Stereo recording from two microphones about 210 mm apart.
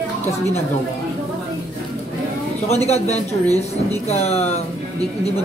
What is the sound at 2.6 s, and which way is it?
Speech, 30° left (ahead or behind).